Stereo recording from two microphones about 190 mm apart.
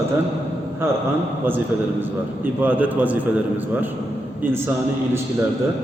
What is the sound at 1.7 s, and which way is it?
A man's voice, 10° right (ahead or behind).